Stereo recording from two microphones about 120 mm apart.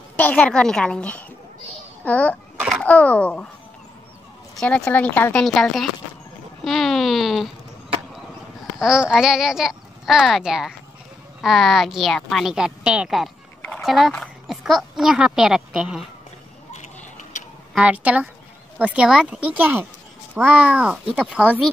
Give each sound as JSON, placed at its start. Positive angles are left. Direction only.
{"t": 0.1, "sound": "speech", "side_deg": 10}
{"t": 4.6, "sound": "a child's voice", "side_deg": 5}
{"t": 8.7, "sound": "a child's voice", "side_deg": -5}
{"t": 16.7, "sound": "a sound", "side_deg": 80}
{"t": 17.7, "sound": "speech", "side_deg": -10}